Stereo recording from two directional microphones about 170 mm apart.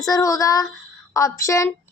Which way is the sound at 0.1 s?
20° left (ahead or behind).